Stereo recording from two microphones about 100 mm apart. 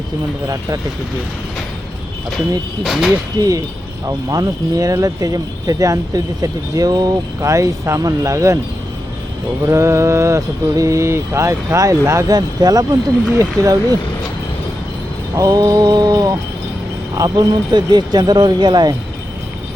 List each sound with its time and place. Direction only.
0.4 s speech: 35° right (ahead or behind)
2.8 s speech: centre (ahead or behind)
3.4 s speech: 35° right (ahead or behind)
9.6 s speech: 30° right (ahead or behind)
15.4 s speech: 35° right (ahead or behind)